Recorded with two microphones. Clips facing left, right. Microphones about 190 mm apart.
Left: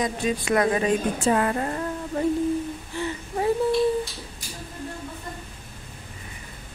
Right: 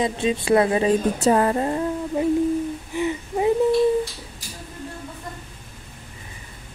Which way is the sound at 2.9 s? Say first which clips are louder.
Right 5 dB; 15° right (ahead or behind).